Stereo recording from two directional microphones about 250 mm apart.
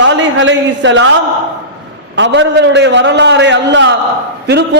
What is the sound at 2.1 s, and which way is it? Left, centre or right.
A man's voice, right.